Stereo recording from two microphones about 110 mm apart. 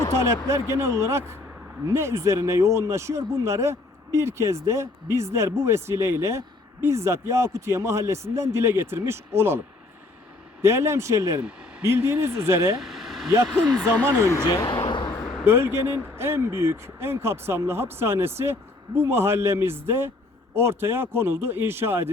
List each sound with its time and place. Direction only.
0.2 s speech: 25° right (ahead or behind)
10.6 s speech: 25° right (ahead or behind)
12.8 s a sound: centre (ahead or behind)
13.5 s speech: 5° left (ahead or behind)
14.0 s speech: 20° right (ahead or behind)
14.4 s speech: 35° left (ahead or behind)
14.7 s a sound: 45° left (ahead or behind)
15.4 s speech: 20° right (ahead or behind)